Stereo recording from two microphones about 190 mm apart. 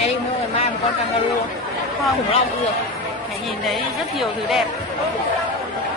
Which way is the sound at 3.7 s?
Centre (ahead or behind).